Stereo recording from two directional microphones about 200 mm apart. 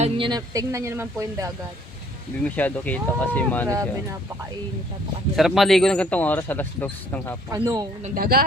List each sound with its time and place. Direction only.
0.0 s speech: 25° right (ahead or behind)
2.4 s speech: 10° left (ahead or behind)
5.4 s speech: centre (ahead or behind)
7.5 s speech: 15° right (ahead or behind)
8.0 s a woman's voice: 45° right (ahead or behind)